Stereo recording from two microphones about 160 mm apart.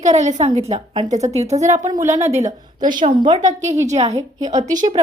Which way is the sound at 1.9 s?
20° right (ahead or behind).